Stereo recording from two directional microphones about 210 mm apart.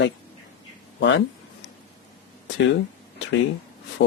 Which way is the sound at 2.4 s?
60° left (ahead or behind).